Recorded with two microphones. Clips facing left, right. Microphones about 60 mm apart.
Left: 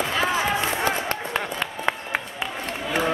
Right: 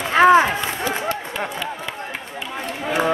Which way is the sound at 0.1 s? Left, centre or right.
Right.